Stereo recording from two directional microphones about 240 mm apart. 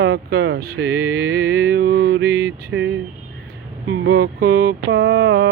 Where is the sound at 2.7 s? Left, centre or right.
Right.